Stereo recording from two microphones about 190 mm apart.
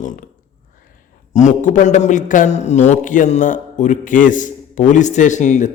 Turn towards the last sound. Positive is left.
turn(degrees=40)  # may be behind; listen again after turning